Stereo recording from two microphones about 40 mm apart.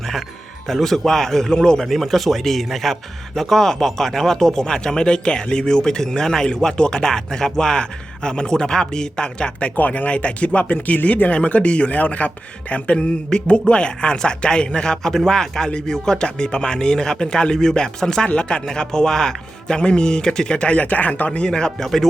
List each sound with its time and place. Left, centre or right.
0.7 s a man's voice: centre
1.8 s a man's voice: centre; by 9.5 s left
9.7 s speech: left
10.1 s a man's voice: left
20.8 s speech: left
21.2 s speech: left